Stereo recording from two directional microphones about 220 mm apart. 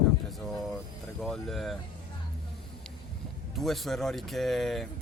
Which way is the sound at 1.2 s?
Centre (ahead or behind).